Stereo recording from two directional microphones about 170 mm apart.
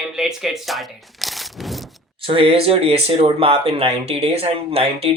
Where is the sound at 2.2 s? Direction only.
35° right (ahead or behind).